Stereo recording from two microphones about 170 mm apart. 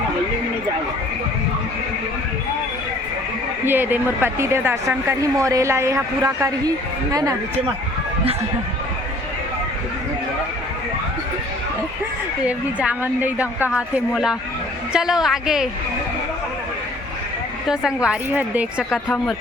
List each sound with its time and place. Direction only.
3.7 s speech: 10° right (ahead or behind)
12.5 s a woman's voice: 10° right (ahead or behind)
17.7 s a woman's voice: 5° right (ahead or behind)
18.9 s a woman's voice: 5° left (ahead or behind)